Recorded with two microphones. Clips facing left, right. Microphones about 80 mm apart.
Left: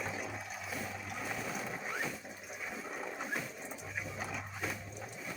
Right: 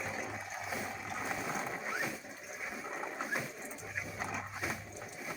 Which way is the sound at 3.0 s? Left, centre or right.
Centre.